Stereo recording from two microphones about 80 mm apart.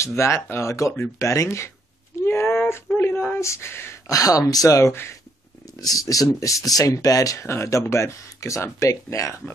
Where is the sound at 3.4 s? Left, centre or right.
Left.